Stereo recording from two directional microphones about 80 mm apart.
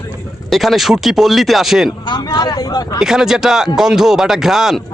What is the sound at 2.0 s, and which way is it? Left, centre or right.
Speech, left.